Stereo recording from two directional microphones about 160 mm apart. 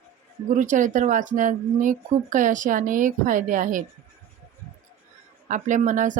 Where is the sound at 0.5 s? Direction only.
50° right (ahead or behind).